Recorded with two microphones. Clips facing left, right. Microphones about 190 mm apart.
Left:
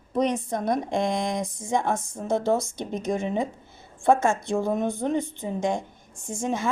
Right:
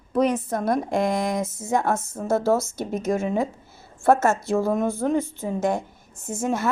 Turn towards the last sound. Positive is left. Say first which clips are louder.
# right 3 dB
turn(degrees=-5)  # may be behind; listen again after turning